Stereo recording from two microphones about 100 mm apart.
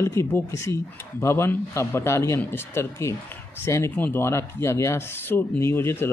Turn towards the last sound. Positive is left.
turn(degrees=25)  # may be behind; listen again after turning